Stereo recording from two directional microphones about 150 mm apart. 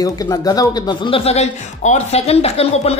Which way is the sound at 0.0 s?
25° left (ahead or behind).